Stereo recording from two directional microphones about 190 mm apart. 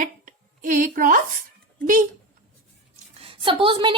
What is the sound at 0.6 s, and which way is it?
Speech, 45° right (ahead or behind).